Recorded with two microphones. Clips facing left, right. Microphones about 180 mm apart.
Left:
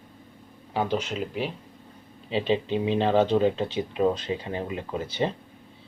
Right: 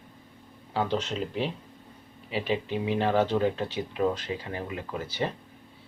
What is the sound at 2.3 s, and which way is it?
Speech, 25° left (ahead or behind).